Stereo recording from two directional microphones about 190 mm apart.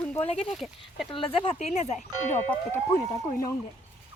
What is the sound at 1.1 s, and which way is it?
Speech, 30° left (ahead or behind).